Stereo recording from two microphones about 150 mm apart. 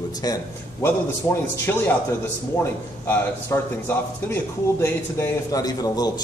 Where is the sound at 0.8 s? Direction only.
15° left (ahead or behind).